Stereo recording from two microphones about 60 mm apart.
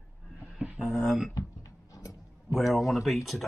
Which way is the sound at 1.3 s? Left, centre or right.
Left.